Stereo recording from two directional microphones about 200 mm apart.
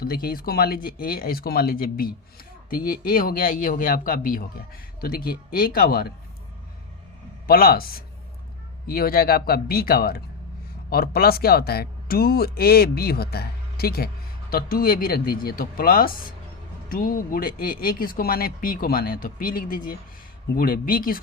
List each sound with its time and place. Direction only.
0.0 s speech: 50° left (ahead or behind)
7.4 s speech: 45° left (ahead or behind)